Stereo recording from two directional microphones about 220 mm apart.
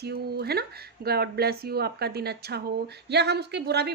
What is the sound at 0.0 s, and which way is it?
A woman's voice, 45° right (ahead or behind).